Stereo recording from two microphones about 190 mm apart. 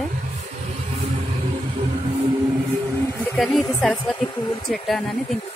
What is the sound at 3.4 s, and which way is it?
Speech, centre (ahead or behind).